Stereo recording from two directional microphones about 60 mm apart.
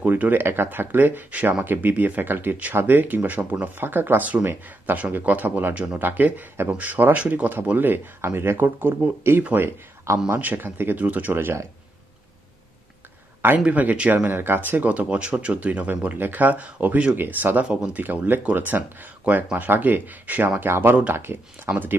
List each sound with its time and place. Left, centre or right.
0.0 s speech: right
10.0 s speech: right
10.4 s speech: right
13.7 s speech: right